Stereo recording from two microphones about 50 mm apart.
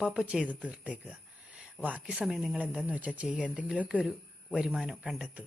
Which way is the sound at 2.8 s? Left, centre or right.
Right.